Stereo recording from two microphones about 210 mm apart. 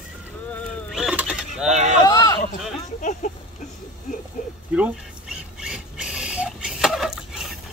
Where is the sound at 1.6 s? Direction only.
35° right (ahead or behind).